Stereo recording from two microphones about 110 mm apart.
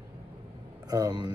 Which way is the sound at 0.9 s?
35° right (ahead or behind).